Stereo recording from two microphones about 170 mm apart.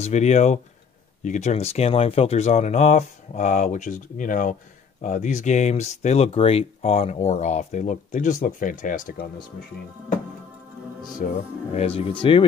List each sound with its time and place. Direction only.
0.0 s speech: 40° left (ahead or behind)
11.2 s speech: 55° left (ahead or behind)
11.7 s speech: 35° left (ahead or behind)